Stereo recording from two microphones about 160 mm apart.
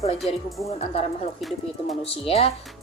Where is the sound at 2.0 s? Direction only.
35° left (ahead or behind).